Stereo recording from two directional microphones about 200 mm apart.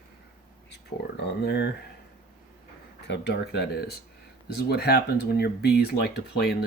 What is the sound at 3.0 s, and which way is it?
Speech, 55° left (ahead or behind).